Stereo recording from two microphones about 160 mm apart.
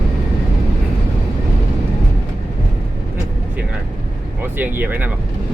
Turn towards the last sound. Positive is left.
turn(degrees=-10)  # may be behind; listen again after turning